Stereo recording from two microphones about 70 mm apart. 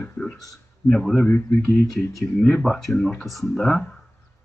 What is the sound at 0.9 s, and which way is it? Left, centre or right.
Speech, centre.